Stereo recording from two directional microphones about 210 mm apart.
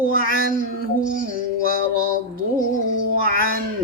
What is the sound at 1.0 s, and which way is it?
Music, 40° left (ahead or behind).